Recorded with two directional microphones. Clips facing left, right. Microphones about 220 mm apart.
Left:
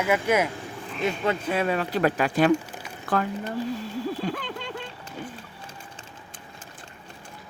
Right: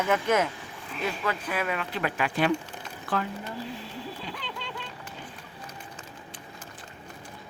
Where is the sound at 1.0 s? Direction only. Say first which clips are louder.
Left 5 dB; 25° left (ahead or behind); by 3.3 s 45° left (ahead or behind).